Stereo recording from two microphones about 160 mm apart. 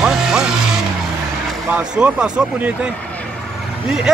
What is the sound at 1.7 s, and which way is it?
Speech, 10° right (ahead or behind).